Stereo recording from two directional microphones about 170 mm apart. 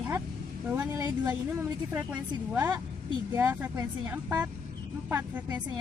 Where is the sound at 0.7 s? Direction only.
15° right (ahead or behind).